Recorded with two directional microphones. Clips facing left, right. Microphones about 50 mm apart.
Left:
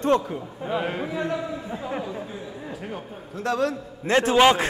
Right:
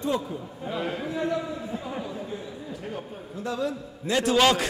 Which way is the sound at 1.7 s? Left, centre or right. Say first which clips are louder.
Left 3 dB; left.